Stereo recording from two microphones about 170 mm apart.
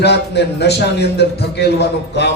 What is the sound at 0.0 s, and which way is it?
Speech, 80° left.